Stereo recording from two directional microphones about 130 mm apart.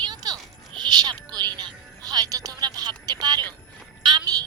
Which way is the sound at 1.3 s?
35° right (ahead or behind).